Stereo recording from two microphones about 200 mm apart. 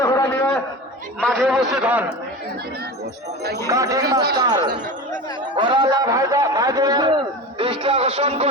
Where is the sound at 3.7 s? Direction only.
15° right (ahead or behind).